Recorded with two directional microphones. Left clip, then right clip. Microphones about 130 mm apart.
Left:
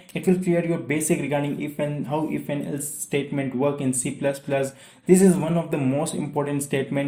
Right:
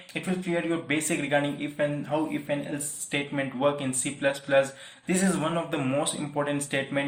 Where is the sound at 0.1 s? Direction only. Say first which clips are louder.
Left 7 dB; 40° left (ahead or behind).